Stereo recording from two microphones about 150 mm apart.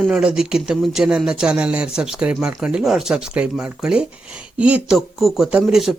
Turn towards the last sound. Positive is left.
turn(degrees=0)  # may be behind; listen again after turning